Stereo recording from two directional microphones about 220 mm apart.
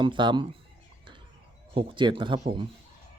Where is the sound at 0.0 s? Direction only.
20° right (ahead or behind).